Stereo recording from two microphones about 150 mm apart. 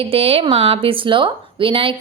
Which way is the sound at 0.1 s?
40° right (ahead or behind).